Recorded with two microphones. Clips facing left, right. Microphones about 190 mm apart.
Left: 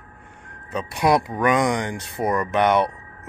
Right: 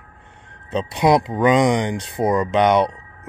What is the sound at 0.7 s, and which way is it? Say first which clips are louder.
Speech: right 3 dB; 25° right (ahead or behind).